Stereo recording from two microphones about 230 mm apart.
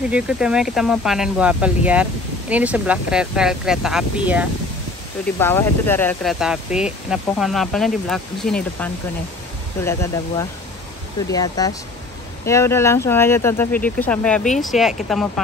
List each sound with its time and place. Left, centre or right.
0.1 s speech: centre
5.4 s speech: centre
6.4 s speech: centre